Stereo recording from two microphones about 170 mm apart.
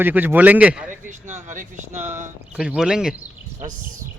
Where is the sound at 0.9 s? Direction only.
45° right (ahead or behind).